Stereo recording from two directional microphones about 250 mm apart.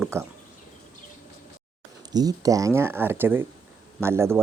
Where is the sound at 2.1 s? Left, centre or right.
Centre.